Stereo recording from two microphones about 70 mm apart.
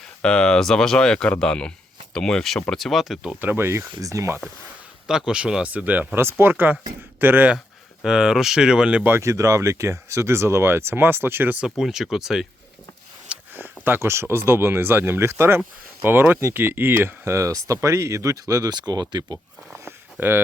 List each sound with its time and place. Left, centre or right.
0.2 s speech: centre
3.4 s speech: right
5.0 s speech: centre
5.7 s speech: right
8.0 s speech: centre
9.2 s speech: right
11.6 s speech: centre
13.5 s speech: right
20.1 s speech: right